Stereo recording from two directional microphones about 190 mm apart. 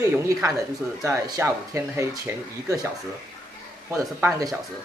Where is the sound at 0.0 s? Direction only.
15° right (ahead or behind).